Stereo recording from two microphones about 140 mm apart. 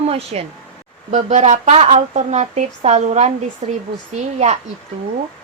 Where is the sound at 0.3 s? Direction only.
50° right (ahead or behind).